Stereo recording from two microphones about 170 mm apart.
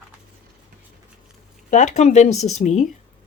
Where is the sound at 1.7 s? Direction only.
45° left (ahead or behind).